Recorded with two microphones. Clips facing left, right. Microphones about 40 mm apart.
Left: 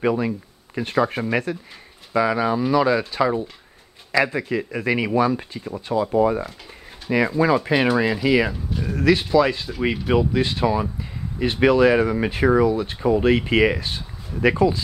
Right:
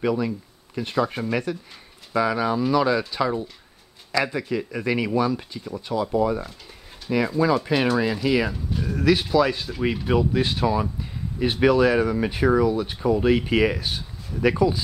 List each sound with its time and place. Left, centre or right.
0.0 s speech: left
2.1 s speech: centre
11.9 s speech: centre
12.6 s speech: centre
13.0 s speech: centre